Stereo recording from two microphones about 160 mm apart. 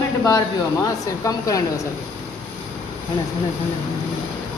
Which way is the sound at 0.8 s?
20° left (ahead or behind).